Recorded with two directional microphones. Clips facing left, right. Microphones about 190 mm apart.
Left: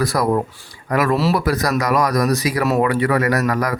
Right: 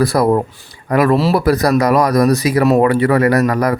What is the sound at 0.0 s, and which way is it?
Speech, 30° right (ahead or behind).